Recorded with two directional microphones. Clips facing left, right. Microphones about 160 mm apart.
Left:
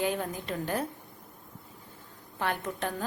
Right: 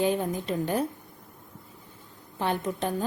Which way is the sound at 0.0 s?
20° right (ahead or behind).